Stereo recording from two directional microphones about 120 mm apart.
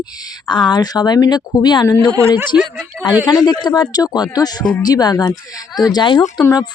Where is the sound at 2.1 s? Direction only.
30° right (ahead or behind).